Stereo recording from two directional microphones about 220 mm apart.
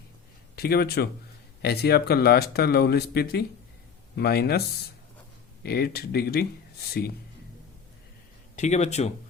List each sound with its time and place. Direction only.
0.5 s speech: 45° left (ahead or behind)
5.6 s speech: 45° left (ahead or behind)
8.5 s speech: 30° left (ahead or behind)